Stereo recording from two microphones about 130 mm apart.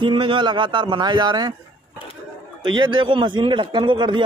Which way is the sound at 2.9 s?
40° right (ahead or behind).